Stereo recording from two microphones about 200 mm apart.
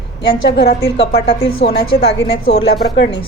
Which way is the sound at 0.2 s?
55° left (ahead or behind).